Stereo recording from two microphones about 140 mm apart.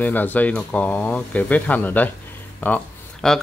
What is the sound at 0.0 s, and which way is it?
Speech, 10° left (ahead or behind).